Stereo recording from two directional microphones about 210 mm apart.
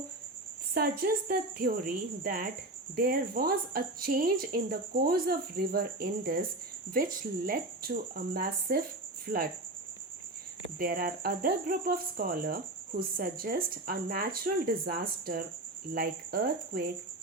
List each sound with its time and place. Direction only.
0.7 s speech: 45° right (ahead or behind)
10.8 s speech: 45° right (ahead or behind)